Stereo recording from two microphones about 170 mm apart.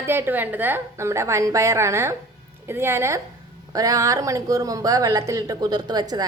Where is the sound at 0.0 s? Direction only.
15° right (ahead or behind).